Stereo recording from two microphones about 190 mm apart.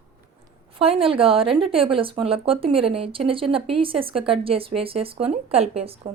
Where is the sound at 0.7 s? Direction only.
30° right (ahead or behind).